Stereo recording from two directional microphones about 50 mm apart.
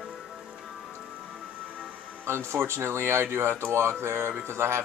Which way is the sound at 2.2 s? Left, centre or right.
Right.